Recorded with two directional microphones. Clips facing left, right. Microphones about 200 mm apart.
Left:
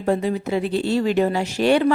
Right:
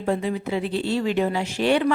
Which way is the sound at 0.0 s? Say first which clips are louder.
Left 3 dB; 40° left (ahead or behind).